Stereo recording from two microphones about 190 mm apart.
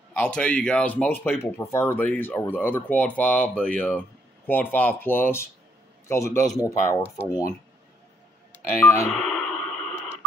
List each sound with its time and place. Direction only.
0.2 s speech: 5° left (ahead or behind)
8.7 s speech: 15° left (ahead or behind)
9.1 s a sound: centre (ahead or behind)